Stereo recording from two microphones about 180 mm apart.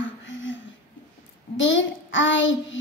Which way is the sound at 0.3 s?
90° left.